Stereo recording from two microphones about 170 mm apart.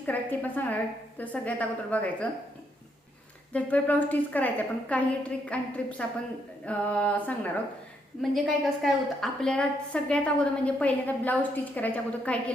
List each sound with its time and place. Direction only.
0.0 s a woman's voice: 10° left (ahead or behind)
3.5 s a woman's voice: 10° left (ahead or behind)